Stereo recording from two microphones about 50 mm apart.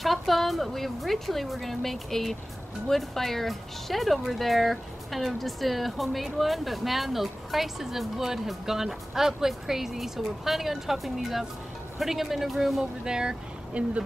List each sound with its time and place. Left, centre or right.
0.0 s a woman's voice: centre
13.0 s speech: centre
13.8 s speech: right